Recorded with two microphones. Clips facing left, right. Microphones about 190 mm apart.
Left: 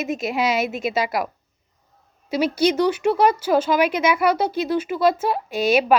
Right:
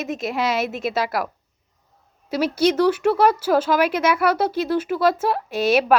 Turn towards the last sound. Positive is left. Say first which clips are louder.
# even
turn(degrees=-5)  # may be behind; listen again after turning